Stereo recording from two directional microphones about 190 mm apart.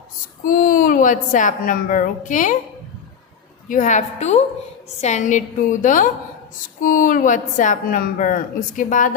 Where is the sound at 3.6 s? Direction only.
40° left (ahead or behind).